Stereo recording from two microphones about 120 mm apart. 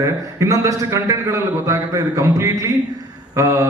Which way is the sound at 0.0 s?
25° right (ahead or behind).